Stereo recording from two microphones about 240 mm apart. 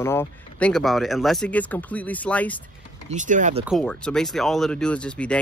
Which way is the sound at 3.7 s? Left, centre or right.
Centre.